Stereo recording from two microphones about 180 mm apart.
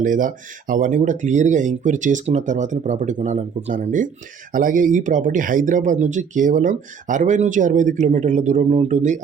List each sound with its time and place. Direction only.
0.0 s speech: 45° right (ahead or behind)